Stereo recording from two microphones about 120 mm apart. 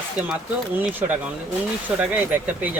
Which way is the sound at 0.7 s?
15° right (ahead or behind).